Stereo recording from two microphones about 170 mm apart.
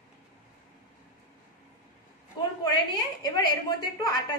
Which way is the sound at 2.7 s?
20° left (ahead or behind).